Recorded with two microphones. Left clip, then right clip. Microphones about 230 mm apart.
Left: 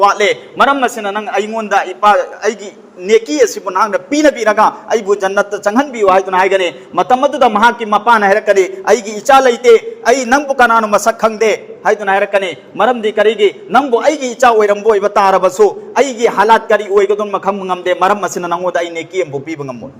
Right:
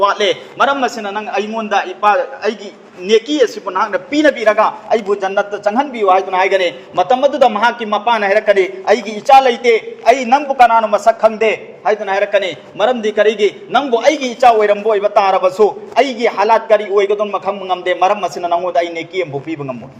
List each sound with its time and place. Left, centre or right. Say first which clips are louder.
0.0 s a man's voice: left 3 dB; left